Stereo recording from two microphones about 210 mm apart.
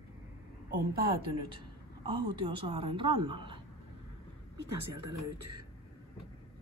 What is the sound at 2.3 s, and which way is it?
A woman's voice, 25° right (ahead or behind).